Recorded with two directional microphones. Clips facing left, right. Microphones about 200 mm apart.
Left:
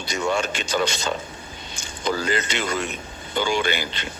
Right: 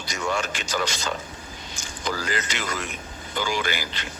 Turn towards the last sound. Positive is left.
turn(degrees=25)  # may be behind; listen again after turning